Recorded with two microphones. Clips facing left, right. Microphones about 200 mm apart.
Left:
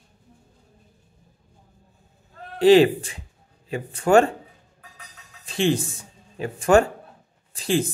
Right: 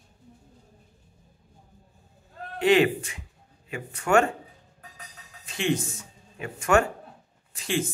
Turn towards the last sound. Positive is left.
turn(degrees=35)  # may be behind; listen again after turning